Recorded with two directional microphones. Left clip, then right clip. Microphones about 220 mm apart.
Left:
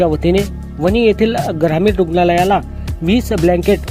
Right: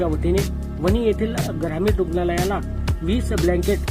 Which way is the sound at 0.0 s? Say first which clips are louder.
Left 8 dB; 40° left (ahead or behind).